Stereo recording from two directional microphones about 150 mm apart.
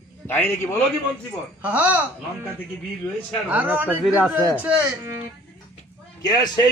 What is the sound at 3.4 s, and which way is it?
Speech, 10° right (ahead or behind).